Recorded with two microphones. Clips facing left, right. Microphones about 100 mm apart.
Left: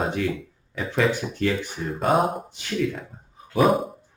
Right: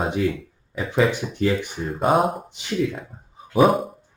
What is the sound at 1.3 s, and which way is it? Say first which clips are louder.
Speech: right 3 dB; 15° right (ahead or behind).